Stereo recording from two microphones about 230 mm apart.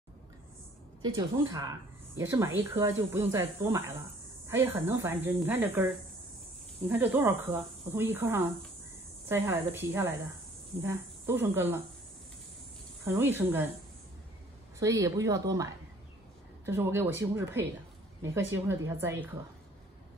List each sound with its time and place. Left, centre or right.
1.0 s speech: centre
6.9 s speech: centre
13.0 s speech: centre
14.8 s speech: centre